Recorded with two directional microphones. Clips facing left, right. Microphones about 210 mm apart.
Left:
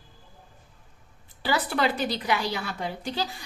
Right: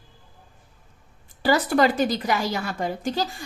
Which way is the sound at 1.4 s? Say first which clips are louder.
Right 6 dB; 45° right (ahead or behind).